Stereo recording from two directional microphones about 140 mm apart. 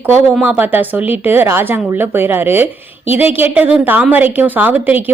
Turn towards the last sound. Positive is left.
turn(degrees=-10)  # may be behind; listen again after turning